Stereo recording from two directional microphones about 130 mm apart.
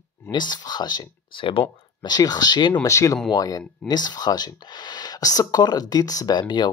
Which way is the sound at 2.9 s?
25° left (ahead or behind).